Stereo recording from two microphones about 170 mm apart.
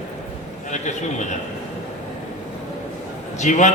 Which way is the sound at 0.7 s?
45° left (ahead or behind).